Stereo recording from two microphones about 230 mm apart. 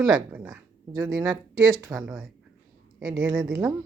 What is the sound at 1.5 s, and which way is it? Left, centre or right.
Speech, right.